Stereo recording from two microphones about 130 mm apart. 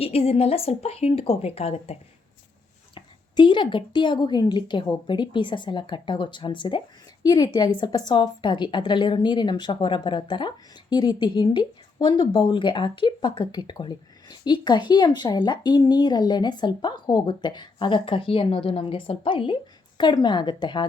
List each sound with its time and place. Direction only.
0.0 s a woman's voice: 50° left (ahead or behind)
2.9 s a woman's voice: 35° left (ahead or behind)
7.2 s a woman's voice: 30° left (ahead or behind)